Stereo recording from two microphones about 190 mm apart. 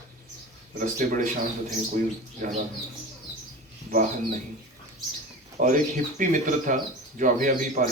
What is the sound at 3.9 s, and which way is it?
Speech, 40° right (ahead or behind).